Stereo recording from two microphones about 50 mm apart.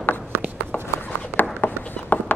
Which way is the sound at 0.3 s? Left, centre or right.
Right.